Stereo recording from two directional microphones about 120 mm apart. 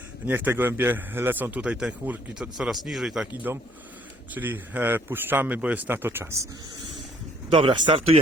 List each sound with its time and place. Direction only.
0.3 s a man's voice: 15° right (ahead or behind)
3.5 s a man's voice: 15° right (ahead or behind)
7.5 s speech: 45° right (ahead or behind)